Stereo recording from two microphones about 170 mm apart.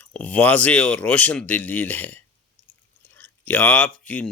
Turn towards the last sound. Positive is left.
turn(degrees=10)  # may be behind; listen again after turning